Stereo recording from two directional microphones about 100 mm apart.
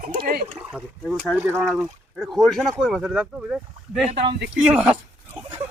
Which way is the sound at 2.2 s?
Centre (ahead or behind).